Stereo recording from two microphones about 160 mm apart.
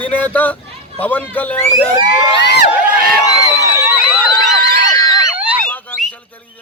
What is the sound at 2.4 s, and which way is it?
Speech, 90° left.